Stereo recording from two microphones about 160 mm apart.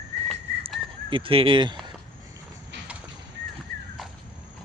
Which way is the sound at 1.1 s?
35° right (ahead or behind).